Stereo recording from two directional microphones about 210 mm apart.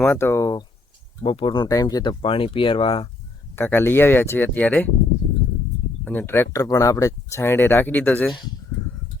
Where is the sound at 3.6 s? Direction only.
10° left (ahead or behind).